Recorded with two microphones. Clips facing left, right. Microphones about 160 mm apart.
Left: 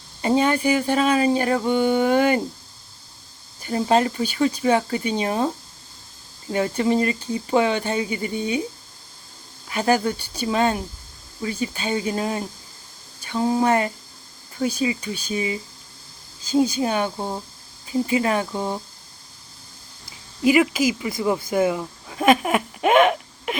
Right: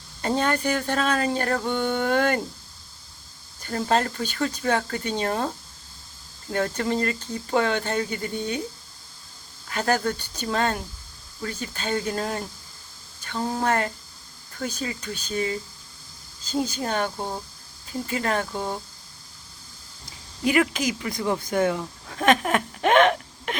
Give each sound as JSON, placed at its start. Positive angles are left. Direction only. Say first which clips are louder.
{"t": 0.2, "sound": "speech", "louder": "left 5 dB", "side_deg": 10}
{"t": 3.6, "sound": "speech", "louder": "left 4 dB", "side_deg": 10}
{"t": 9.6, "sound": "speech", "louder": "left 4 dB", "side_deg": 15}
{"t": 20.4, "sound": "speech", "louder": "left 4 dB", "side_deg": 5}